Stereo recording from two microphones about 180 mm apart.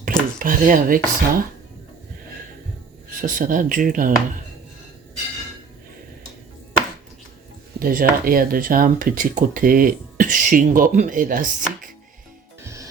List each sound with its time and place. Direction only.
0.3 s speech: 50° right (ahead or behind)
3.2 s speech: 45° right (ahead or behind)
7.8 s speech: 50° right (ahead or behind)
12.6 s music: 15° right (ahead or behind)